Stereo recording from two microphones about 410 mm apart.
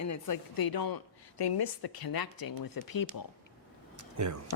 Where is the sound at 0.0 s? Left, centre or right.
Left.